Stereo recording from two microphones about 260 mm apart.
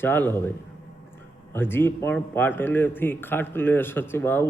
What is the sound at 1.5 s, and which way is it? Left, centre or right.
Speech, centre.